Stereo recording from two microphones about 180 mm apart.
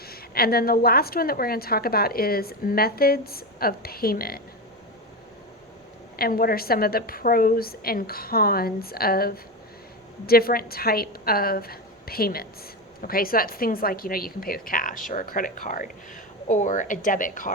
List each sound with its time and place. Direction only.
0.0 s a woman's voice: 60° left (ahead or behind)
6.1 s a woman's voice: 55° left (ahead or behind)